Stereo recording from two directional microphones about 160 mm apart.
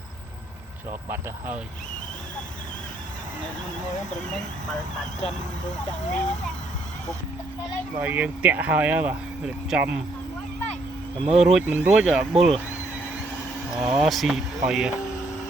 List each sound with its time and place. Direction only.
5.7 s speech: 50° left (ahead or behind)
7.9 s speech: 10° right (ahead or behind)
11.3 s speech: centre (ahead or behind)
13.7 s speech: 5° right (ahead or behind)